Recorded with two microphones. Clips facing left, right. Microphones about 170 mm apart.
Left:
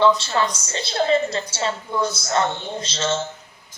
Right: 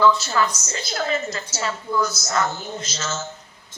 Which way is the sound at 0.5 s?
30° left (ahead or behind).